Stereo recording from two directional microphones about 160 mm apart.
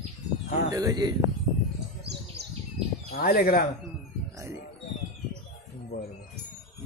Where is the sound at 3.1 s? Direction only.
70° left (ahead or behind).